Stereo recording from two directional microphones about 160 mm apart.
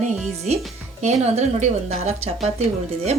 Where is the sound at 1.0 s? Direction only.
45° right (ahead or behind).